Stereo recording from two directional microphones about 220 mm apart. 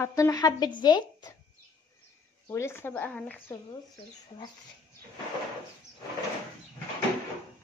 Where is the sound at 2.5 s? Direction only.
10° left (ahead or behind).